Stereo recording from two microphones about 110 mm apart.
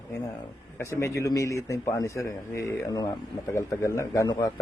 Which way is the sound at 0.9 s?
25° left (ahead or behind).